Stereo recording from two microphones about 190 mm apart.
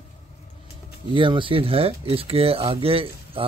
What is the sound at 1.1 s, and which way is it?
Speech, 25° right (ahead or behind).